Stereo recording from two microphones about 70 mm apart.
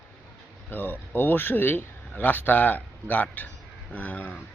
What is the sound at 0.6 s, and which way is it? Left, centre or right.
Speech, left.